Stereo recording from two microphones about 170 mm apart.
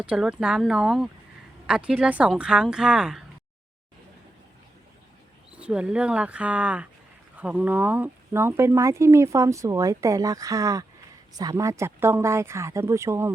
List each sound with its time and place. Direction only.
0.0 s speech: 5° right (ahead or behind)
5.5 s speech: 5° right (ahead or behind)